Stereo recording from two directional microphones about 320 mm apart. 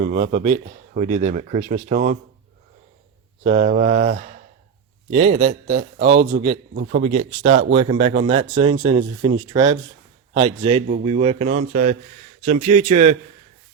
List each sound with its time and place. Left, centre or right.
0.0 s speech: right
3.4 s a man's voice: centre